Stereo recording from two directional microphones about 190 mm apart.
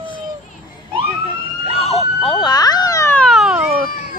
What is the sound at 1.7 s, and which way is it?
Police car, 30° left (ahead or behind).